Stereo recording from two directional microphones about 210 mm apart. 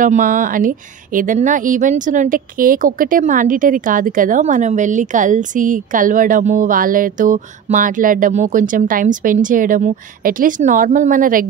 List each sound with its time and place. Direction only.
0.0 s speech: 40° right (ahead or behind)